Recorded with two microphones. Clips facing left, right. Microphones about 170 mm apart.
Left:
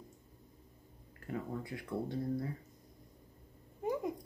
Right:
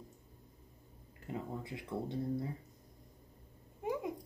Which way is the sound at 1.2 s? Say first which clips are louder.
Left 2 dB; 20° right (ahead or behind).